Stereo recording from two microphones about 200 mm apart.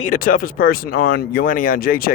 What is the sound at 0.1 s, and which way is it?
Speech, 45° left (ahead or behind).